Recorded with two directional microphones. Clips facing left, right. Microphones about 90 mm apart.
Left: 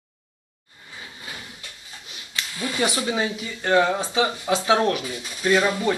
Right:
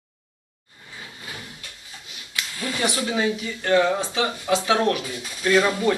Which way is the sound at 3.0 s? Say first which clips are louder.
Right 1 dB; 15° left (ahead or behind).